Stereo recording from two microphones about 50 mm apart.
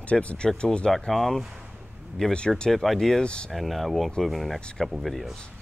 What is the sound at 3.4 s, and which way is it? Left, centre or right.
Speech, centre.